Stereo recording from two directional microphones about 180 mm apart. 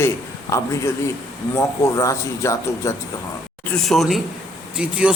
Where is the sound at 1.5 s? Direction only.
15° left (ahead or behind).